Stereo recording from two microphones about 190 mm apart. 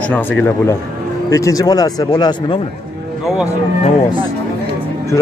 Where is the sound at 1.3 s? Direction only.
15° left (ahead or behind).